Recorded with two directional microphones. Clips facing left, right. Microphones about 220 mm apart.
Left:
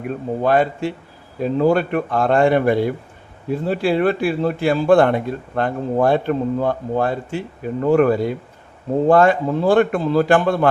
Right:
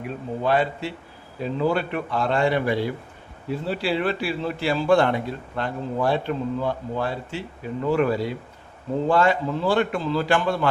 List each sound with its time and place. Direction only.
0.4 s a man's voice: 50° left (ahead or behind)